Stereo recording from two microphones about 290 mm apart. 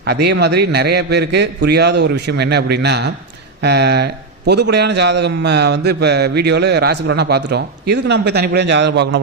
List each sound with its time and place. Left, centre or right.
0.0 s a man's voice: right